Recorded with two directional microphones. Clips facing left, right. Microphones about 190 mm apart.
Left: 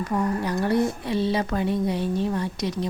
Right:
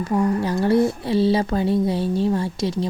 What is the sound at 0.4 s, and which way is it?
Speech, 30° right (ahead or behind).